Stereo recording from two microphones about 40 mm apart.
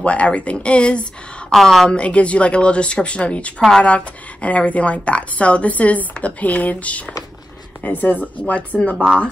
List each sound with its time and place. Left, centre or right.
0.0 s speech: left
1.5 s a woman's voice: centre
1.9 s speech: left
8.9 s a woman's voice: centre